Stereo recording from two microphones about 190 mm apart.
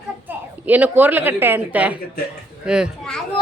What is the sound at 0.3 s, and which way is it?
A woman's voice, 10° right (ahead or behind).